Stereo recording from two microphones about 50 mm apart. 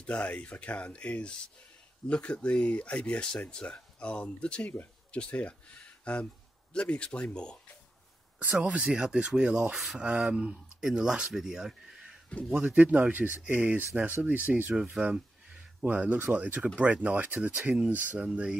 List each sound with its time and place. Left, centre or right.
0.0 s speech: left
8.7 s speech: centre
12.3 s speech: left
12.6 s speech: right
15.0 s speech: right
18.2 s speech: right